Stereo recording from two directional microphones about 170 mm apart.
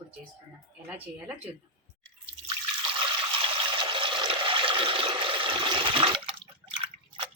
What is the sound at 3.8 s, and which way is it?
Toilet flush, 30° right (ahead or behind).